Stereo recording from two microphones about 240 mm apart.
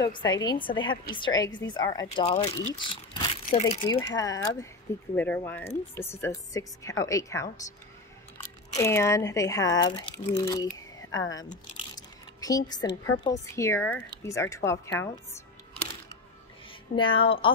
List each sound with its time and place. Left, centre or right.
0.0 s a woman's voice: centre
4.2 s speech: centre
8.7 s speech: centre
11.4 s squish: centre
13.0 s speech: centre
16.9 s a woman's voice: left